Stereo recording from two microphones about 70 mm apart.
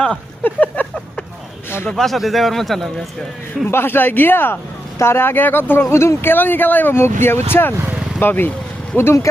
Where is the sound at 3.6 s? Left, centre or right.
Left.